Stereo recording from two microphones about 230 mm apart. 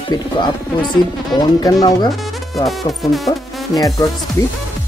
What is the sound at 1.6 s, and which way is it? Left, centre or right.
Speech, centre.